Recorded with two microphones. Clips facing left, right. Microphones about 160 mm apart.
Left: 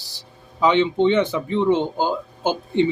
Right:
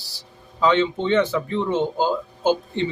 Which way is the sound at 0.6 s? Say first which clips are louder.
Left 3 dB; 15° left (ahead or behind).